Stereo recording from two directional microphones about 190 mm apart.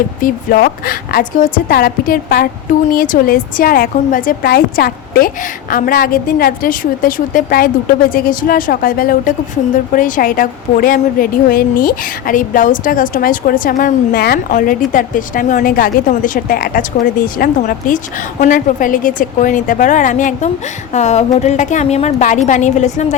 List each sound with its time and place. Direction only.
0.2 s a woman's voice: 45° left (ahead or behind)